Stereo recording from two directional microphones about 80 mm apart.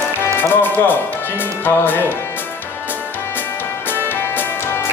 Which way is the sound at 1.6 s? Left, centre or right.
Left.